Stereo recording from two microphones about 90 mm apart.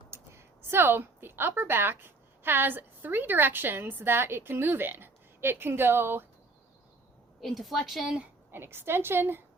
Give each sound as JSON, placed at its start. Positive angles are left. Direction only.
{"t": 0.1, "sound": "a woman's voice", "side_deg": -25}
{"t": 7.4, "sound": "a woman's voice", "side_deg": 0}
{"t": 8.4, "sound": "a woman's voice", "side_deg": -25}